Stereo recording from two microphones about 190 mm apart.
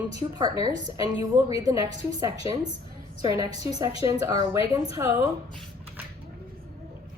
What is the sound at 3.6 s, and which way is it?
A woman's voice, 20° right (ahead or behind).